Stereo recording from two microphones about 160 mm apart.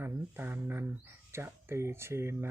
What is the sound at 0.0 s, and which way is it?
Speech, 10° right (ahead or behind).